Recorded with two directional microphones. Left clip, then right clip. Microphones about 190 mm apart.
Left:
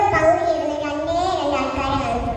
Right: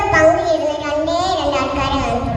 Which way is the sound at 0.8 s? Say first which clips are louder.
Right 4 dB; 45° right (ahead or behind).